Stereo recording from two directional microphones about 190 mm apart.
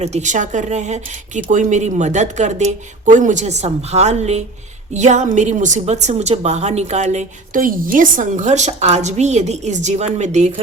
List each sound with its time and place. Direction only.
0.0 s a woman's voice: 35° right (ahead or behind)